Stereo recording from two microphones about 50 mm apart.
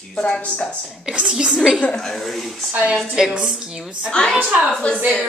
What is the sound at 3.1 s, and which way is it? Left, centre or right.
Speech, centre.